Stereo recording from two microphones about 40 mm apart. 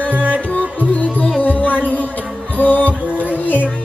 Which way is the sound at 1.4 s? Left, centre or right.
Left.